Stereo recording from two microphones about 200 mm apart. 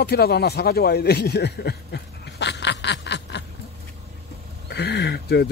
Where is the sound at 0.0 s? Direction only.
50° left (ahead or behind).